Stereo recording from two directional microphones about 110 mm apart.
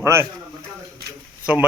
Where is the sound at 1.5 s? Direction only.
15° right (ahead or behind).